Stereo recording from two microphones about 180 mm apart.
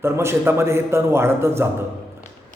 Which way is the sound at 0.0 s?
15° right (ahead or behind).